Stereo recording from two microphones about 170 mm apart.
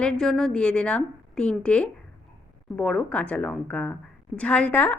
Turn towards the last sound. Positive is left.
turn(degrees=10)  # may be behind; listen again after turning